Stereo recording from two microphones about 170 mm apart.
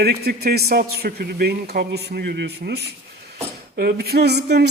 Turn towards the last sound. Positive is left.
turn(degrees=-75)  # may be behind; listen again after turning